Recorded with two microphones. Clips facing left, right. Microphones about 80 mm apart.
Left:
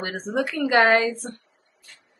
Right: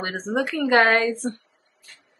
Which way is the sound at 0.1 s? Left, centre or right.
Centre.